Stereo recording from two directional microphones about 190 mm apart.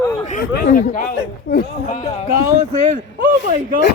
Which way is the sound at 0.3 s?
45° left (ahead or behind).